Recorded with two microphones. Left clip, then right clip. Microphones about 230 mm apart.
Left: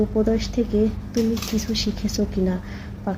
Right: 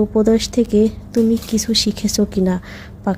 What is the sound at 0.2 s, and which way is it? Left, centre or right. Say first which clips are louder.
A woman's voice: right 9 dB; right.